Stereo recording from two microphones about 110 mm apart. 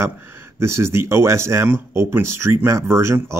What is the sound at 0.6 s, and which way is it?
Speech, 25° right (ahead or behind).